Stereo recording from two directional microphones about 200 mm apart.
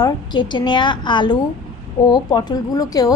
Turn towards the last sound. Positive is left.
turn(degrees=20)  # may be behind; listen again after turning